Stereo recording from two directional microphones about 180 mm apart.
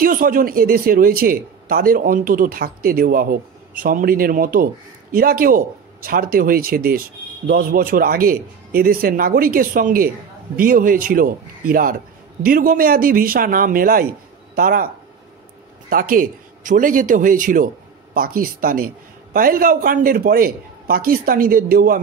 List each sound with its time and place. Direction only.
0.0 s speech: 50° right (ahead or behind)
15.9 s speech: 50° right (ahead or behind)